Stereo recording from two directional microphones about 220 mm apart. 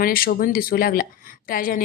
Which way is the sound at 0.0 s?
40° left (ahead or behind).